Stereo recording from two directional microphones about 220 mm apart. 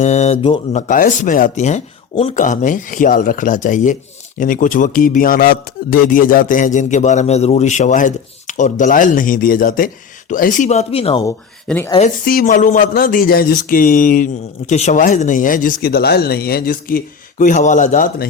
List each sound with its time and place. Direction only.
0.0 s speech: 30° left (ahead or behind)
11.3 s speech: 10° left (ahead or behind)
11.9 s speech: 35° left (ahead or behind)